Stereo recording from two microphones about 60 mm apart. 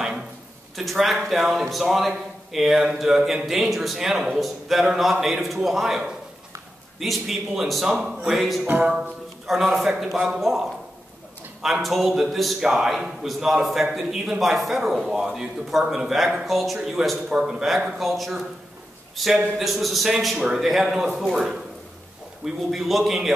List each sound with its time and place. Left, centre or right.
0.7 s a man's voice: centre
8.6 s music: right
9.8 s a man's voice: centre